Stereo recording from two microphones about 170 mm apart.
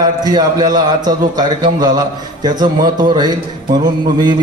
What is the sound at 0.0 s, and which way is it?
A man's voice, 25° right (ahead or behind).